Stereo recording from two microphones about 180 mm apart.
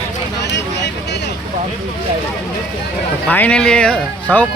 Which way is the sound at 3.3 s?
10° left (ahead or behind).